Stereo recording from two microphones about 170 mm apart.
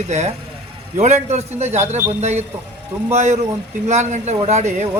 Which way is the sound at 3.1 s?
40° right (ahead or behind).